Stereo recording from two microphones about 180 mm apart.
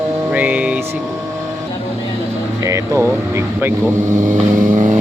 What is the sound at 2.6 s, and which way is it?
Vehicle, 15° right (ahead or behind).